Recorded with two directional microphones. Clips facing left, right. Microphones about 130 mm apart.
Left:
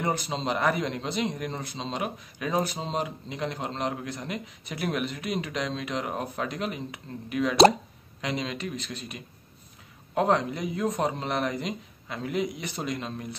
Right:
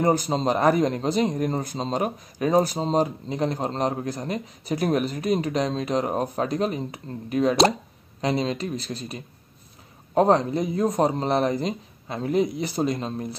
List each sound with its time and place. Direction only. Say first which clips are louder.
0.0 s a man's voice: right 7 dB; 40° right (ahead or behind)